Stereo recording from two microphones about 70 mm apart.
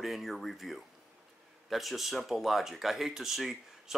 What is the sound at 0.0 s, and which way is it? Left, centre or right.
Speech, centre.